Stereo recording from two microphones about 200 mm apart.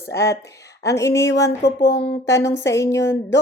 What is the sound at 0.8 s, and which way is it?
A woman's voice, 15° left (ahead or behind).